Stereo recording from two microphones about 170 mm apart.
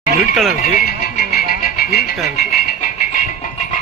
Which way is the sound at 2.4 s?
60° left (ahead or behind).